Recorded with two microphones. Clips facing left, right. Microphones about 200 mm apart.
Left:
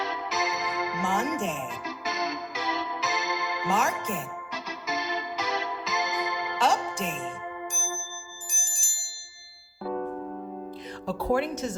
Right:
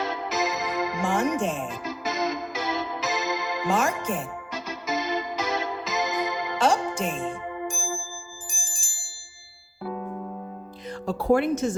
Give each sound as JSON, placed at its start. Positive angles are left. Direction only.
{"t": 0.0, "sound": "music", "side_deg": -45}
{"t": 11.0, "sound": "speech", "side_deg": -45}